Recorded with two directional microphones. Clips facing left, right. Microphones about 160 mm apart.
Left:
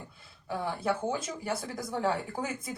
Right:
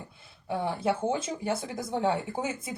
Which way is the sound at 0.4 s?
25° right (ahead or behind).